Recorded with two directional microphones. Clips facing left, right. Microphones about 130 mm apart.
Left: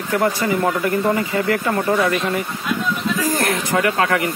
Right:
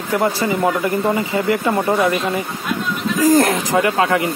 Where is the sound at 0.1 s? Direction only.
20° right (ahead or behind).